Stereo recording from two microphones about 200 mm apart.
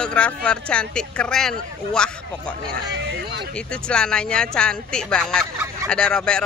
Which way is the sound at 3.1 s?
55° right (ahead or behind).